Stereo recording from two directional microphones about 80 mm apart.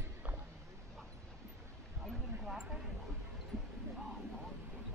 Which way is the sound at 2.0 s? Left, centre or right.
Centre.